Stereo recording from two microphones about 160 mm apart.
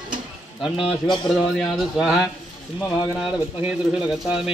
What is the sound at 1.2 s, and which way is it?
Speech, centre (ahead or behind).